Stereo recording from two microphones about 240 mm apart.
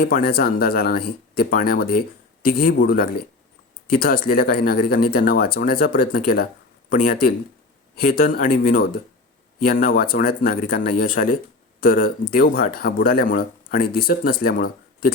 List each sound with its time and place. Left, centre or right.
0.0 s speech: left